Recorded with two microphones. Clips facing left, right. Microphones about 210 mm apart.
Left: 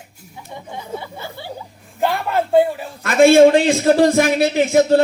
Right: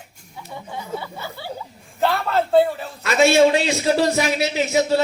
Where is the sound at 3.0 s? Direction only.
50° left (ahead or behind).